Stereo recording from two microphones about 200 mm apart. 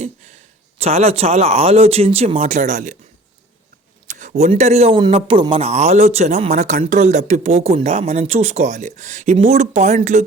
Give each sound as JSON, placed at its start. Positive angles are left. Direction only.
{"t": 0.0, "sound": "speech", "side_deg": -35}
{"t": 4.0, "sound": "speech", "side_deg": -40}